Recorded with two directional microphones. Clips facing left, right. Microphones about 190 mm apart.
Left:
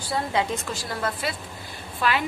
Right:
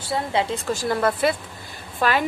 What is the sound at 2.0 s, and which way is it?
Speech, 50° right (ahead or behind).